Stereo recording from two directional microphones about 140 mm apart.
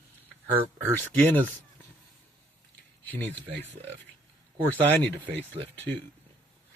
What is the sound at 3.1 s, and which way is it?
Speech, 10° left (ahead or behind).